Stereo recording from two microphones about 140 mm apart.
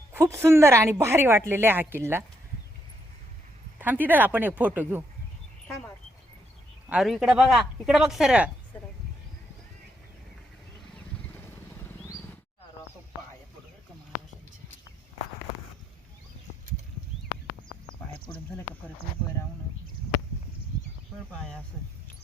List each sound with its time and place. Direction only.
0.1 s a woman's voice: 20° right (ahead or behind)
3.8 s a woman's voice: 15° right (ahead or behind)
6.8 s speech: 5° right (ahead or behind)